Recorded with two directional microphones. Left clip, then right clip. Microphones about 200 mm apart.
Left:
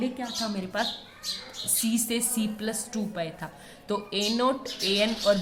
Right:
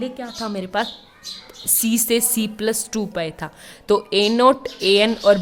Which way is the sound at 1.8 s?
50° right (ahead or behind).